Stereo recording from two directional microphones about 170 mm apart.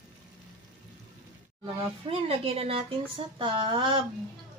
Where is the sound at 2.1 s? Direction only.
35° right (ahead or behind).